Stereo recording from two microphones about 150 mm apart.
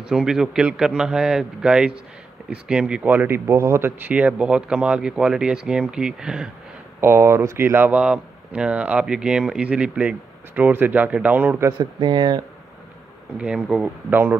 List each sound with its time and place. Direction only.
0.0 s speech: 5° right (ahead or behind)
7.0 s speech: 15° right (ahead or behind)
11.8 s speech: 30° right (ahead or behind)
13.4 s speech: 5° right (ahead or behind)